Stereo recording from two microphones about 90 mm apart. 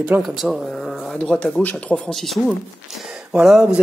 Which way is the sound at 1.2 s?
10° left (ahead or behind).